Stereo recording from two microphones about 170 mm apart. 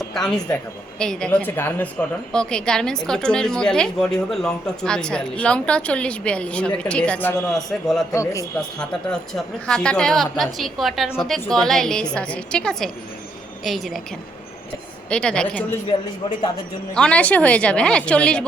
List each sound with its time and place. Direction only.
0.1 s a woman's voice: 5° left (ahead or behind)
8.1 s a man's voice: 20° left (ahead or behind)
8.8 s a woman's voice: 5° left (ahead or behind)
15.1 s a woman's voice: 5° left (ahead or behind)
16.9 s a woman's voice: 5° left (ahead or behind)